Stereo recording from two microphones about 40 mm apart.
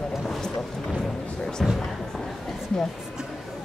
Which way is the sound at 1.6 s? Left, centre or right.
Centre.